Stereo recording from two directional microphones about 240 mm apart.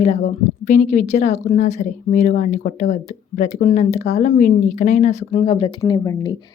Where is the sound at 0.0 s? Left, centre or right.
Left.